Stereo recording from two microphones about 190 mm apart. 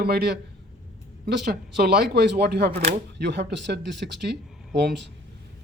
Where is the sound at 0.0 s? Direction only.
60° right (ahead or behind).